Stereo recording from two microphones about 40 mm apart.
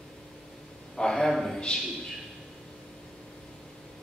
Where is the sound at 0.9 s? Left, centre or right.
Centre.